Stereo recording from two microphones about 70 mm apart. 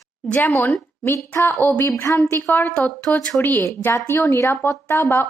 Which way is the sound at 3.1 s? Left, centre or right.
Centre.